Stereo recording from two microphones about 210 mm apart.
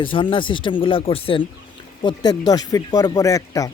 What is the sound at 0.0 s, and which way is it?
Speech, 25° left (ahead or behind).